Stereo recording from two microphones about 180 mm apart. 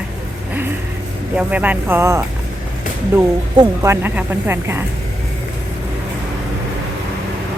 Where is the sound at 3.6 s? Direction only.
15° right (ahead or behind).